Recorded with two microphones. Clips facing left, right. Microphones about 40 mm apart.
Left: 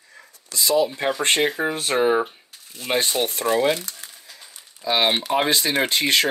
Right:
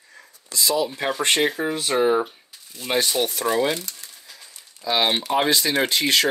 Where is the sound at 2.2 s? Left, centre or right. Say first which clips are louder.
Left 2 dB; left.